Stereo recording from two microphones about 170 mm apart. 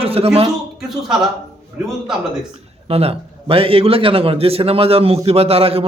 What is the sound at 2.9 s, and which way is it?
A man's voice, 35° right (ahead or behind).